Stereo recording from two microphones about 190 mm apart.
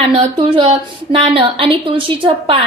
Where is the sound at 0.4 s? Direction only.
25° right (ahead or behind).